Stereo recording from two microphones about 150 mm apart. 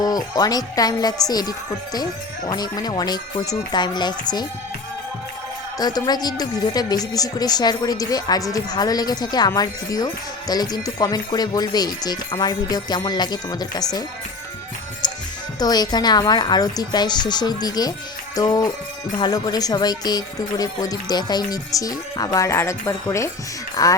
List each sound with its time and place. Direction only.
0.0 s speech: 25° left (ahead or behind)
5.7 s speech: 25° left (ahead or behind)
15.5 s speech: 25° left (ahead or behind)